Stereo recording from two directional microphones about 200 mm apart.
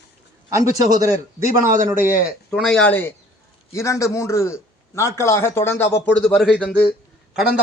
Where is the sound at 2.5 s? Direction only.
5° left (ahead or behind).